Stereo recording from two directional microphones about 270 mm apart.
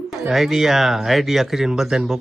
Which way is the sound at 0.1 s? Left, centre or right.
Centre.